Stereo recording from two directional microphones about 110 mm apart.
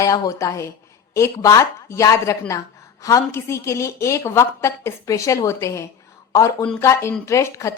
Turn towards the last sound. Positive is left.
turn(degrees=25)  # may be behind; listen again after turning